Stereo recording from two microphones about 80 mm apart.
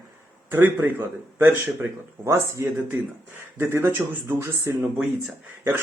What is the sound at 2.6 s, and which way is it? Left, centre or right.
A man's voice, right.